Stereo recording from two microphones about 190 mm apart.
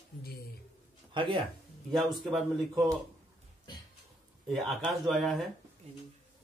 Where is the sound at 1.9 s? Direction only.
Centre (ahead or behind).